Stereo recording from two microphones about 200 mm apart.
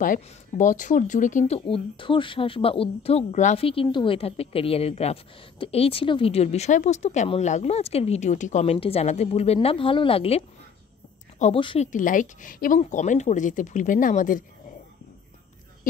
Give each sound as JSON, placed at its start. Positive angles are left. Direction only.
{"t": 0.0, "sound": "speech", "side_deg": 40}
{"t": 1.7, "sound": "speech", "side_deg": 25}
{"t": 11.9, "sound": "speech", "side_deg": 40}